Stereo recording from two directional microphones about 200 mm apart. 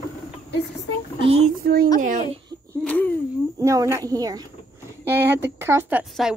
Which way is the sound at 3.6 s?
15° right (ahead or behind).